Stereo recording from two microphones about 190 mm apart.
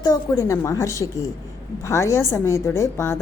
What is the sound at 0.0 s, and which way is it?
A woman's voice, 20° left (ahead or behind).